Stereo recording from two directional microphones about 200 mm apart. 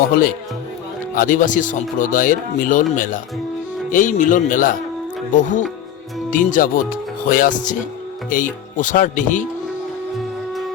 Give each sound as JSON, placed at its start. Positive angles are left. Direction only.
{"t": 1.1, "sound": "speech", "side_deg": 40}